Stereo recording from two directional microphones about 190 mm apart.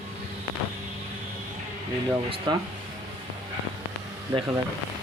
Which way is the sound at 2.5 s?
20° right (ahead or behind).